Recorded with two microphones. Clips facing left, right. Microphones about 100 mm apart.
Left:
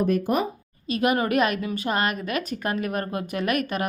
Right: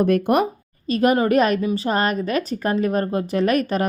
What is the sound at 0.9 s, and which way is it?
A woman's voice, 40° right (ahead or behind).